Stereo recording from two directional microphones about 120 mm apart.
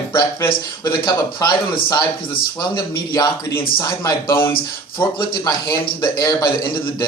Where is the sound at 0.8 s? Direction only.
35° left (ahead or behind).